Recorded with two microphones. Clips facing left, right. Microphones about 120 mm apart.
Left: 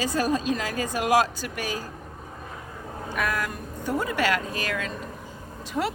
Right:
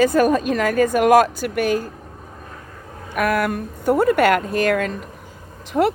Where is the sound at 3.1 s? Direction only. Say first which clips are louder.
Right 9 dB; 60° right (ahead or behind).